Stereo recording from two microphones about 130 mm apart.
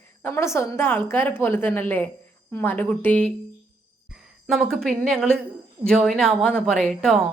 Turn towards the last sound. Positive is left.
turn(degrees=0)  # may be behind; listen again after turning